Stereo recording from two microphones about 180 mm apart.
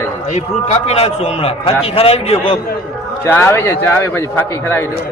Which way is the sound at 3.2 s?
15° left (ahead or behind).